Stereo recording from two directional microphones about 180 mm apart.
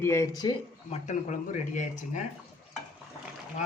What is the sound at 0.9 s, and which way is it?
Speech, 40° left (ahead or behind).